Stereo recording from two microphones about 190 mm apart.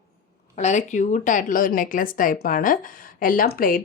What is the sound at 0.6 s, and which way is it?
A woman's voice, 40° left (ahead or behind).